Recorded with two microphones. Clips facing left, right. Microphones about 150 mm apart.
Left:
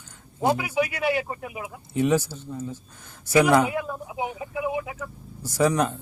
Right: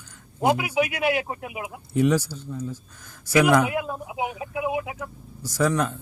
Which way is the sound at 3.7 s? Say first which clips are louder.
Right 1 dB; 15° right (ahead or behind).